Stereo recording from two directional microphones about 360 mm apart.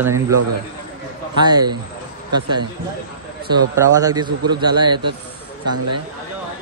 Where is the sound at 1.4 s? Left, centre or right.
Centre.